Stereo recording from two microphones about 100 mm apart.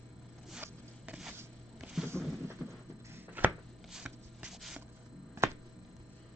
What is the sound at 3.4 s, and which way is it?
Chopping, 20° right (ahead or behind).